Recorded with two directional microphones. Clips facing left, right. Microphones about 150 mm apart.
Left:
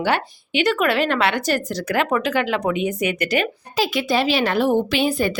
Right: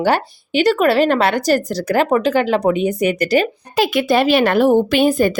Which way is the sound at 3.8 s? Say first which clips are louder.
Right 5 dB; 55° right (ahead or behind).